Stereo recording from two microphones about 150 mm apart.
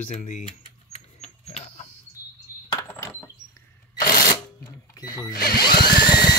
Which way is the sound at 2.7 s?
20° left (ahead or behind).